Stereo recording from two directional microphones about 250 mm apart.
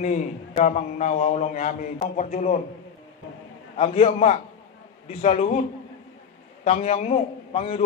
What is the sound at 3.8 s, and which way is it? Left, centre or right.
A man's voice, left.